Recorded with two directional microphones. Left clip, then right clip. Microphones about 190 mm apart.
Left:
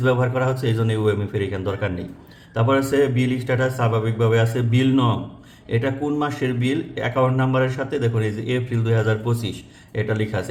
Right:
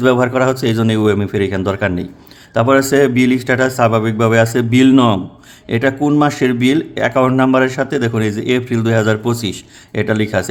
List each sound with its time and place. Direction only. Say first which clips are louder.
0.0 s a man's voice: right 8 dB; 45° right (ahead or behind)